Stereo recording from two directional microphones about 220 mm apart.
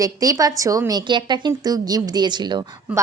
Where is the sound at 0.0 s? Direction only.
15° right (ahead or behind).